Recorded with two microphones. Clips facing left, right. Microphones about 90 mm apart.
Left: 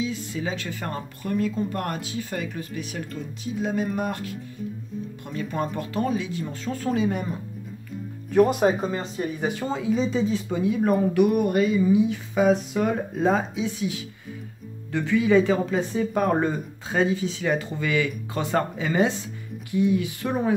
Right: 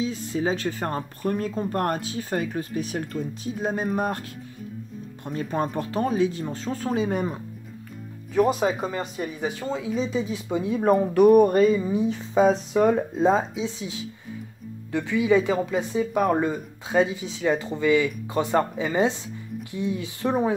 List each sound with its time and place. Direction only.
0.0 s speech: 35° right (ahead or behind)
8.7 s speech: 5° right (ahead or behind)
10.5 s speech: 30° right (ahead or behind)
13.2 s speech: 25° right (ahead or behind)
16.9 s speech: 20° right (ahead or behind)